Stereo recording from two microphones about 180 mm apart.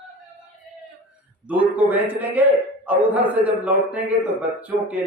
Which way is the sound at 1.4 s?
10° right (ahead or behind).